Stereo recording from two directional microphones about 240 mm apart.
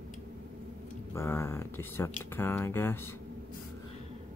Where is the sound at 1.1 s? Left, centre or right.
Centre.